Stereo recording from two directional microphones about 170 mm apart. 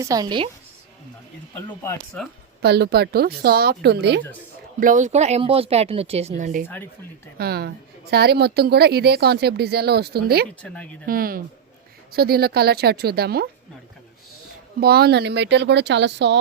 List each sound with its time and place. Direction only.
0.0 s a woman's voice: 20° right (ahead or behind)
1.6 s speech: 15° left (ahead or behind)
2.6 s speech: 75° right (ahead or behind)
4.8 s a woman's voice: 50° right (ahead or behind)
7.3 s speech: 65° right (ahead or behind)
10.6 s speech: 5° left (ahead or behind)
11.0 s speech: 60° right (ahead or behind)
14.8 s speech: 70° right (ahead or behind); by 16.4 s 90° right